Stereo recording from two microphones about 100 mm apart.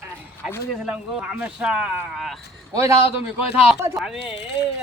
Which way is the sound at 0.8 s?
10° right (ahead or behind).